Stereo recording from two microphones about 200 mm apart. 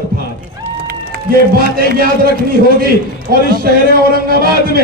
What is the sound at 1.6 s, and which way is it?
A man's voice, 50° right (ahead or behind).